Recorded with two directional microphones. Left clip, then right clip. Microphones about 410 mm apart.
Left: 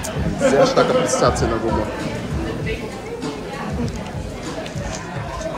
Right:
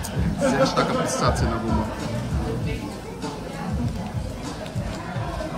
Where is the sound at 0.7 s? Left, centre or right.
Centre.